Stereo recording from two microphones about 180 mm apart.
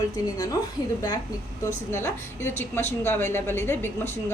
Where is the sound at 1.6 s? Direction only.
15° left (ahead or behind).